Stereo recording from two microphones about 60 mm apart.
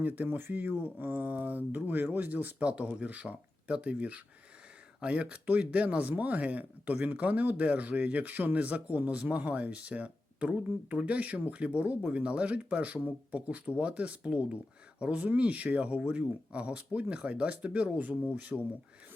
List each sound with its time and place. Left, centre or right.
0.0 s speech: right